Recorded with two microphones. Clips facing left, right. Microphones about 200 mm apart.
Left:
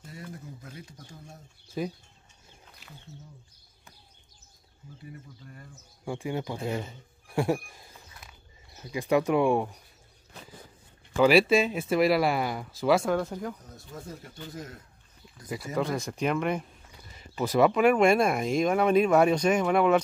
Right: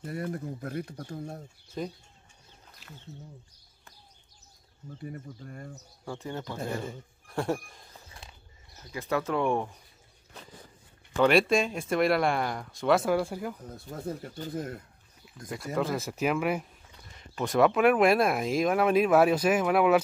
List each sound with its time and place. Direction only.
0.0 s speech: 60° right (ahead or behind)
1.7 s speech: 5° left (ahead or behind)
5.1 s speech: 45° right (ahead or behind)
6.0 s speech: 10° left (ahead or behind)
8.1 s a sound: 30° right (ahead or behind)
8.9 s speech: 15° left (ahead or behind)
11.1 s speech: 5° left (ahead or behind)
13.9 s speech: 55° right (ahead or behind)
15.2 s speech: centre (ahead or behind)